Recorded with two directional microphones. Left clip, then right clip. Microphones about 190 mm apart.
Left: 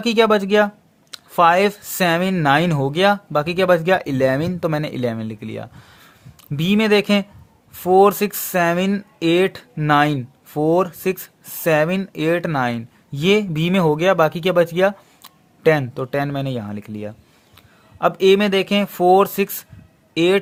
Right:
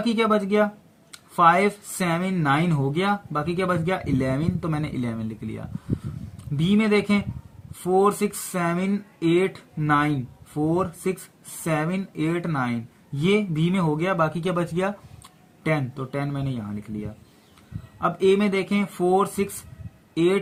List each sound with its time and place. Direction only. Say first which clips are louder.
0.0 s speech: left 7 dB; 45° left (ahead or behind)